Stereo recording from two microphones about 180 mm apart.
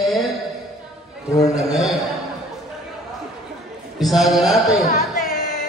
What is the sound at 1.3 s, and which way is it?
Speech, 20° left (ahead or behind).